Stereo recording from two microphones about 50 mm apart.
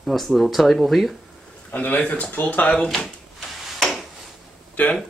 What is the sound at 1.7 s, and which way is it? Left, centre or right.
Speech, left.